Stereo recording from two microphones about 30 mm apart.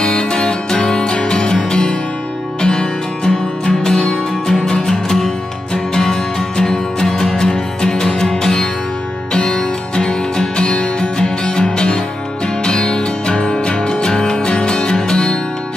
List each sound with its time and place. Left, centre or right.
0.0 s music: left